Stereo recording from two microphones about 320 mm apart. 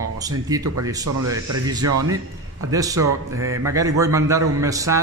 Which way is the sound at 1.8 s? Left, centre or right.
Right.